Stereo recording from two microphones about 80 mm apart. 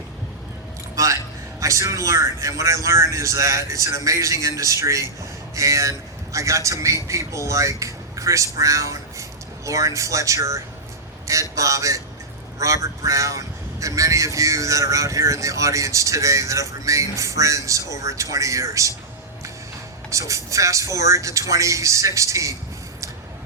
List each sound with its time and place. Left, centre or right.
0.9 s a man's voice: right
20.1 s speech: right